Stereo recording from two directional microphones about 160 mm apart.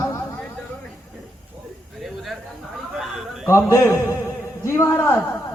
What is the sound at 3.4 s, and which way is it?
A man's voice, 15° left (ahead or behind).